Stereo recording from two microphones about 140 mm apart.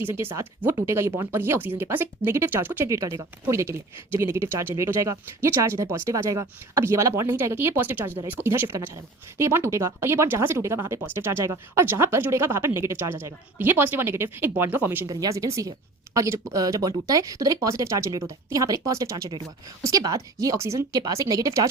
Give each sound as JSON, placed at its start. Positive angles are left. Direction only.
{"t": 0.0, "sound": "speech", "side_deg": -15}
{"t": 15.0, "sound": "speech", "side_deg": -25}